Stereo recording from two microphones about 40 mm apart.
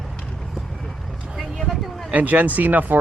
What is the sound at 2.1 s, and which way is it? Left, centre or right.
Speech, right.